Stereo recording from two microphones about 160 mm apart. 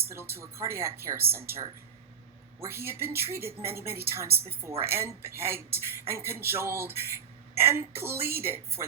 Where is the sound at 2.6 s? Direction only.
15° right (ahead or behind).